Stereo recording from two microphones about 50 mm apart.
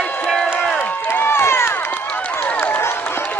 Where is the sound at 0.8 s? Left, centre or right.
Left.